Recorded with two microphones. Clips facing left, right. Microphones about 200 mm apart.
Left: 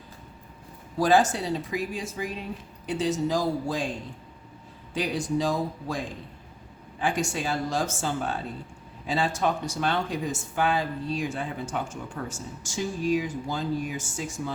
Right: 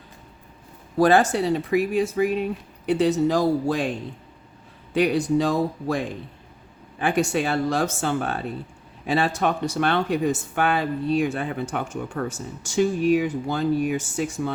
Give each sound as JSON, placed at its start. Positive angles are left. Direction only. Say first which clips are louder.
{"t": 0.9, "sound": "speech", "louder": "right 4 dB", "side_deg": -60}
{"t": 4.9, "sound": "speech", "louder": "right 7 dB", "side_deg": -65}